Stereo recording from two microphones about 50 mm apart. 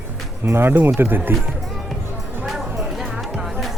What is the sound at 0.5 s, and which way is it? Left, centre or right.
Speech, right.